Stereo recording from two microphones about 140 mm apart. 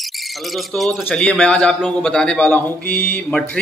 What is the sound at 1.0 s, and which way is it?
A man's voice, 10° left (ahead or behind).